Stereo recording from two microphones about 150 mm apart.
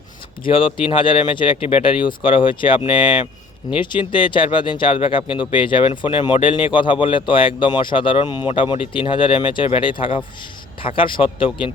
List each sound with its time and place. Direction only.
0.4 s speech: 35° left (ahead or behind)